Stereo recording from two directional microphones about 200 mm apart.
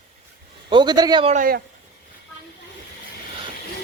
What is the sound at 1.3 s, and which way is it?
Speech, 40° right (ahead or behind).